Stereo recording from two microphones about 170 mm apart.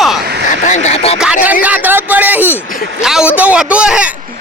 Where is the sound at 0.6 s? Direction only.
45° left (ahead or behind).